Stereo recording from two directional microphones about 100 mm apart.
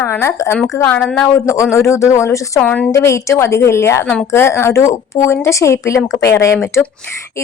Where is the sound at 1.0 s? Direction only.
5° left (ahead or behind).